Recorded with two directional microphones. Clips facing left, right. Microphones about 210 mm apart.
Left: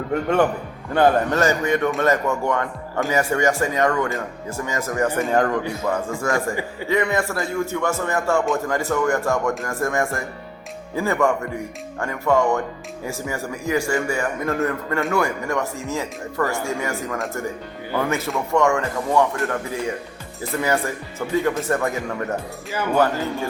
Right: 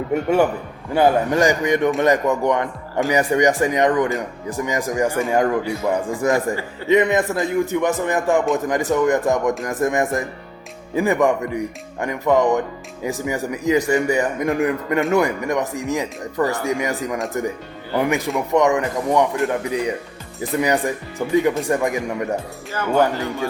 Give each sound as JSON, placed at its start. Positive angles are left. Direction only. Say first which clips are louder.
{"t": 0.1, "sound": "speech", "louder": "right 2 dB", "side_deg": -10}